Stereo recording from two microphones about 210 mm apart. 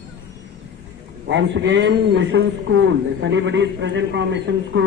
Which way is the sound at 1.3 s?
60° right (ahead or behind).